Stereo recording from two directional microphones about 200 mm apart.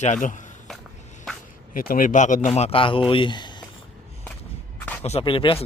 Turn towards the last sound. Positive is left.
turn(degrees=25)  # may be behind; listen again after turning